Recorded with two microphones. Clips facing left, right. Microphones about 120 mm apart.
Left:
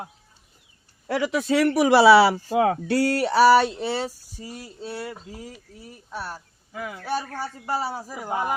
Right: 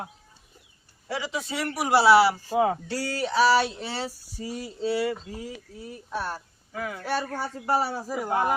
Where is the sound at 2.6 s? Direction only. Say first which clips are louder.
Left 5 dB; 70° left (ahead or behind).